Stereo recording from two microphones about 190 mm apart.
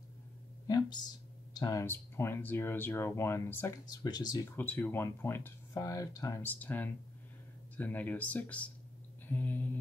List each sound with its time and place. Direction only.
0.7 s speech: 20° left (ahead or behind)
4.6 s speech: 10° left (ahead or behind)